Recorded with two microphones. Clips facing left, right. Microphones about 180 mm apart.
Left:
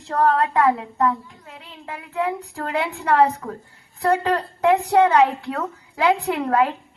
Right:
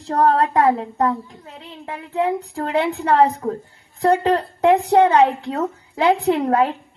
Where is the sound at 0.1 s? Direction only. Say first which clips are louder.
Right 2 dB; 35° right (ahead or behind).